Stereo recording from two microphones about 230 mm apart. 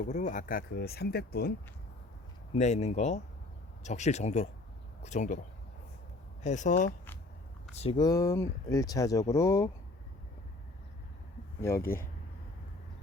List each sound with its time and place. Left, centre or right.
0.0 s speech: left
2.6 s speech: left
6.4 s speech: left
7.8 s speech: left
11.6 s speech: centre